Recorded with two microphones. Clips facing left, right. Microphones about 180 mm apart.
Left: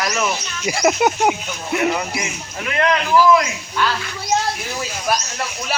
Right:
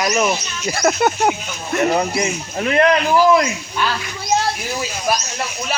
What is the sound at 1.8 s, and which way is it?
A man's voice, 35° right (ahead or behind).